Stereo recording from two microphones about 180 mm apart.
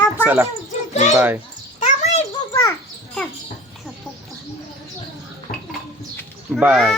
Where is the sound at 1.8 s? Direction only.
40° left (ahead or behind).